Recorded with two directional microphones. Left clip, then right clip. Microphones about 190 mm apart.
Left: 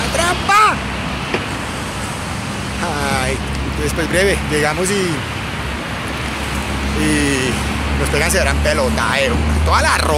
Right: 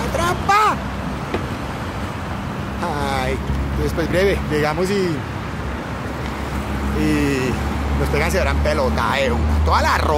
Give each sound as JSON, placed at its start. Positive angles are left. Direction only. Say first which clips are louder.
{"t": 0.2, "sound": "vehicle", "louder": "left 4 dB", "side_deg": -20}
{"t": 4.1, "sound": "speech", "louder": "left 3 dB", "side_deg": -10}
{"t": 7.0, "sound": "speech", "louder": "left 3 dB", "side_deg": -10}